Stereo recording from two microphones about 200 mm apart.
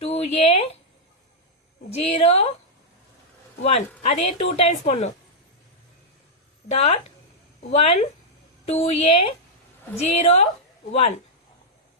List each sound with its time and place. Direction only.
0.0 s speech: 30° left (ahead or behind)
2.0 s a woman's voice: 30° left (ahead or behind)
3.6 s a woman's voice: 30° left (ahead or behind)
6.7 s a woman's voice: 30° left (ahead or behind)